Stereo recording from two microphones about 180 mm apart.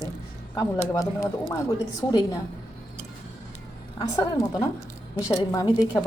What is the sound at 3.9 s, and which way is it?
A woman's voice, 20° left (ahead or behind).